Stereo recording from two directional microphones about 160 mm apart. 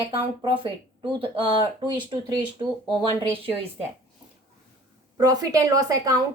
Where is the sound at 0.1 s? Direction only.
35° right (ahead or behind).